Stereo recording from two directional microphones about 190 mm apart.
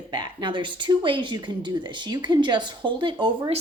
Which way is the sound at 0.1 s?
25° right (ahead or behind).